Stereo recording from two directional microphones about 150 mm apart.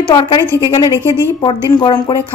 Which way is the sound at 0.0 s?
30° left (ahead or behind).